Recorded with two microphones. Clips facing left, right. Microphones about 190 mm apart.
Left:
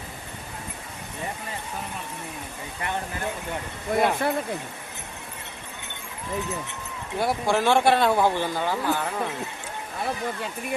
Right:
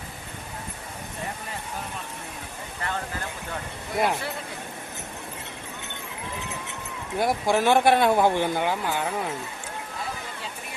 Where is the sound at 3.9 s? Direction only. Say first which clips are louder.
Left 3 dB; 55° left (ahead or behind).